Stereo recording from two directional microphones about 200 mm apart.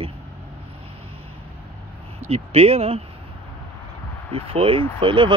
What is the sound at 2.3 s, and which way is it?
Speech, 30° right (ahead or behind).